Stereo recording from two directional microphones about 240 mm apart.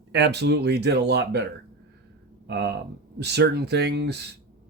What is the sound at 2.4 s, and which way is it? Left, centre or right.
Speech, right.